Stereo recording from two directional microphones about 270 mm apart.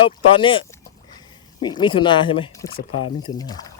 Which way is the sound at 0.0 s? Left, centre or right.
Centre.